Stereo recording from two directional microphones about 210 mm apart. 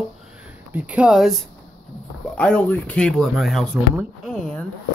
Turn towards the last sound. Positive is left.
turn(degrees=5)  # may be behind; listen again after turning